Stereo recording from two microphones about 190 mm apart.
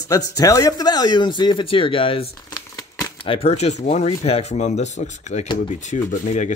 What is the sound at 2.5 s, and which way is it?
Crumpling, 20° left (ahead or behind).